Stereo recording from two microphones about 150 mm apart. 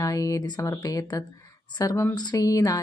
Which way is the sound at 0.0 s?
20° left (ahead or behind).